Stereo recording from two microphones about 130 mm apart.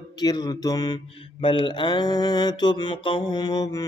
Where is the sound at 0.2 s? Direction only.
30° left (ahead or behind).